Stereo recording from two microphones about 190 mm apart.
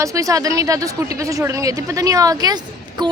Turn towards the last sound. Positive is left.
turn(degrees=-25)  # may be behind; listen again after turning